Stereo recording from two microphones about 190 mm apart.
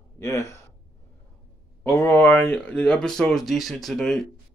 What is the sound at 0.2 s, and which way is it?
Speech, 15° left (ahead or behind).